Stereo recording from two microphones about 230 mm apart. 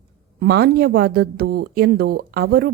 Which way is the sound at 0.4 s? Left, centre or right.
Right.